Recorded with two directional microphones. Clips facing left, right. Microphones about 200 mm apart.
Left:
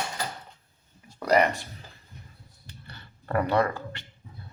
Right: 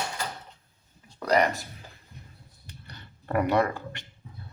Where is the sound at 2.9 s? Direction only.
15° right (ahead or behind).